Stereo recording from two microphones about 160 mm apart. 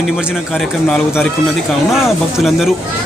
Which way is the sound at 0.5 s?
5° left (ahead or behind).